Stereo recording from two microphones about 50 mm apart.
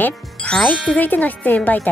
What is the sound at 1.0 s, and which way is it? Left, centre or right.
Speech, left.